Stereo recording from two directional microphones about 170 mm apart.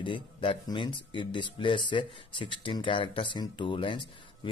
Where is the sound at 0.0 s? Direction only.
30° left (ahead or behind).